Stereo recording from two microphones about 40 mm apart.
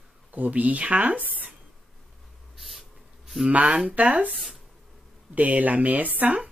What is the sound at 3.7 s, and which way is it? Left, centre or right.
Speech, right.